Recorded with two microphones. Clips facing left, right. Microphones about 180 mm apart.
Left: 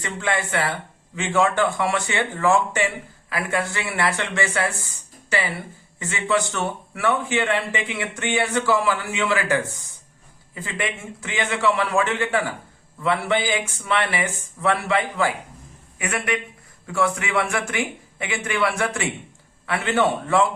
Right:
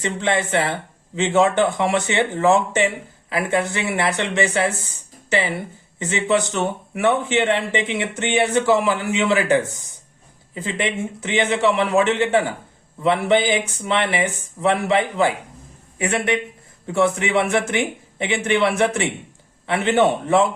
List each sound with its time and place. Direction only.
0.0 s speech: 20° right (ahead or behind)